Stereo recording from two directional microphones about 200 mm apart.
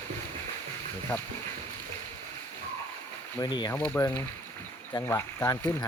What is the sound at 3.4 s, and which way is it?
Speech, 20° left (ahead or behind).